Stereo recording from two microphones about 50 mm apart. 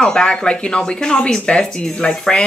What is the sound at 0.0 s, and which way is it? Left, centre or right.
Speech, centre.